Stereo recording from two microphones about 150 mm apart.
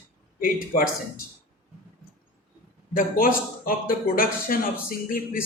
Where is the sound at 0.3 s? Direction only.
65° left (ahead or behind).